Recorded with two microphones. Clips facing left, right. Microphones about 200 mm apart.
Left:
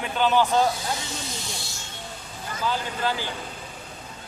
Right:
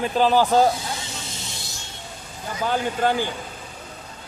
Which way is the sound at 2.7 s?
50° right (ahead or behind).